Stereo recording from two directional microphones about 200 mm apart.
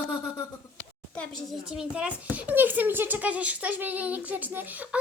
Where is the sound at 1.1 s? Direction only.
5° left (ahead or behind).